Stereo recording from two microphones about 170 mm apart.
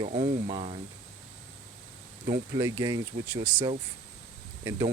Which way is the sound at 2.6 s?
20° right (ahead or behind).